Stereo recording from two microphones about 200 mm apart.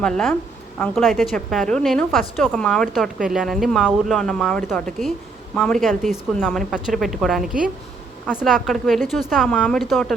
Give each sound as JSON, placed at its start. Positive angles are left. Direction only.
{"t": 0.0, "sound": "a woman's voice", "side_deg": 5}